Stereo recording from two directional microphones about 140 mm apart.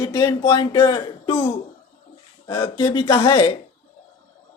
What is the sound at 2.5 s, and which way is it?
Speech, 35° left (ahead or behind).